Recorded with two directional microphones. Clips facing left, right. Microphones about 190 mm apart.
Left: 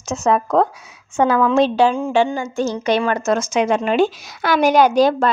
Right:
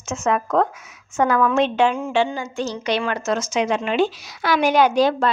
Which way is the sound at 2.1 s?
45° left (ahead or behind).